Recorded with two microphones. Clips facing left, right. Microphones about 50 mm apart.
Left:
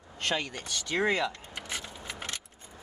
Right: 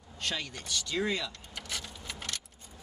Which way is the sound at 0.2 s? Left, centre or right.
Left.